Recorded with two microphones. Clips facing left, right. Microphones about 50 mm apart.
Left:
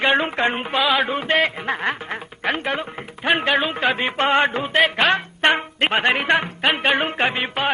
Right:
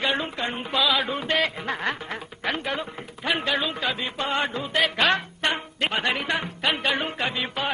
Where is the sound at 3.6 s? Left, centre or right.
Left.